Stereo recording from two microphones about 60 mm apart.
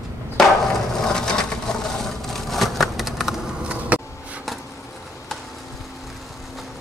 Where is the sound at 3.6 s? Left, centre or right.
Right.